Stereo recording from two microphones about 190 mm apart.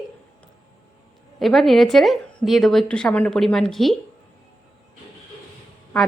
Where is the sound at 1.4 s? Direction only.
Centre (ahead or behind).